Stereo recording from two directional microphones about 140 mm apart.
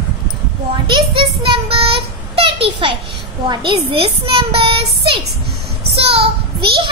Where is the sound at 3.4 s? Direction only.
40° right (ahead or behind).